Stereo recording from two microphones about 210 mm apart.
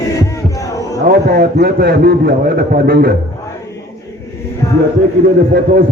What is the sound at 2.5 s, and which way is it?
Speech, 50° right (ahead or behind).